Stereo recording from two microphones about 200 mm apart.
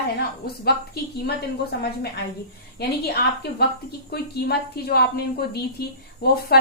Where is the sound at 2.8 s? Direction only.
50° left (ahead or behind).